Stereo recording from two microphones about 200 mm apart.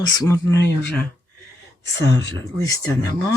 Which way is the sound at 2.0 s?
60° left (ahead or behind).